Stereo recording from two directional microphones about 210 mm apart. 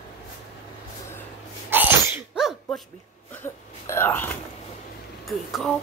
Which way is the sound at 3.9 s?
10° left (ahead or behind).